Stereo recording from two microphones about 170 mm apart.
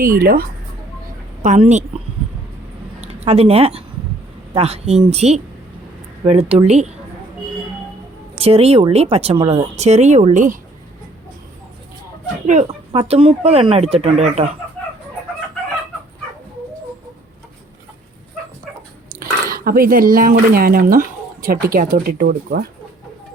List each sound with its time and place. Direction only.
1.4 s a woman's voice: 45° right (ahead or behind)
3.0 s speech: 35° right (ahead or behind)
8.4 s speech: 35° right (ahead or behind)
12.5 s speech: 40° right (ahead or behind)
19.2 s speech: 60° right (ahead or behind)